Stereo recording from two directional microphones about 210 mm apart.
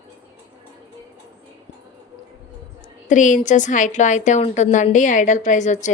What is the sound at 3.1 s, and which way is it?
A woman's voice, 35° left (ahead or behind).